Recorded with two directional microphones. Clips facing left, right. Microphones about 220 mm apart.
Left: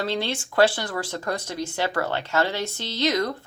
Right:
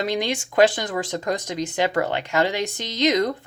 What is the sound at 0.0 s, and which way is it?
Speech, 15° right (ahead or behind).